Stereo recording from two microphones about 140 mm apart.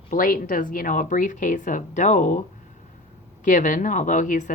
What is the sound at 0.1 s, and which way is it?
Speech, 70° left (ahead or behind).